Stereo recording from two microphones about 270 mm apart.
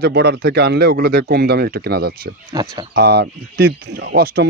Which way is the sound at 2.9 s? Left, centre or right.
Right.